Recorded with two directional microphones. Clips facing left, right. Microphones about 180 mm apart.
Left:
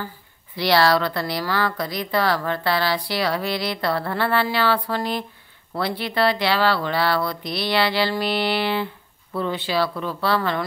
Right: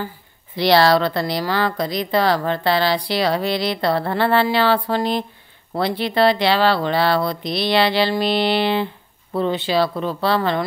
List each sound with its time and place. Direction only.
0.6 s speech: 25° right (ahead or behind)